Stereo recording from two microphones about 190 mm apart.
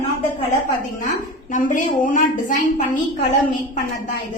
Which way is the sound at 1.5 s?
45° left (ahead or behind).